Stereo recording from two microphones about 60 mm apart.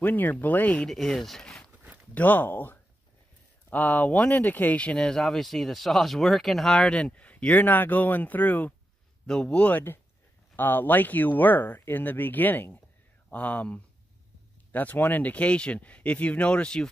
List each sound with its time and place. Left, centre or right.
0.0 s speech: left
0.8 s speech: centre
2.1 s speech: left
9.2 s speech: centre
10.5 s speech: left; by 16.9 s centre